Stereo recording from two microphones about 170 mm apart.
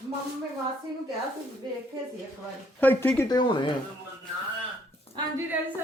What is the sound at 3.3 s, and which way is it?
Speech, 25° left (ahead or behind).